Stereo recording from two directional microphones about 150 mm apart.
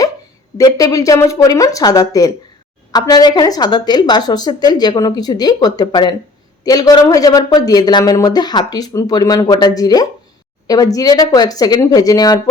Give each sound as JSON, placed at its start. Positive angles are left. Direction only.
{"t": 0.5, "sound": "speech", "side_deg": 25}